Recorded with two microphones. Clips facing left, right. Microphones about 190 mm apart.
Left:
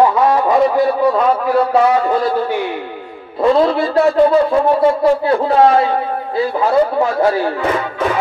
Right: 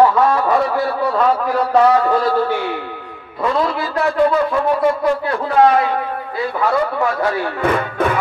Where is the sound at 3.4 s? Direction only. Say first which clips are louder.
Left 6 dB; 30° left (ahead or behind).